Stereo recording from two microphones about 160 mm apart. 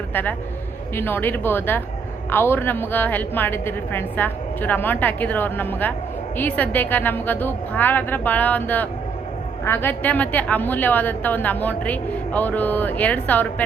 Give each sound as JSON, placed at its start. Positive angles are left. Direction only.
{"t": 0.1, "sound": "a man's voice", "side_deg": 10}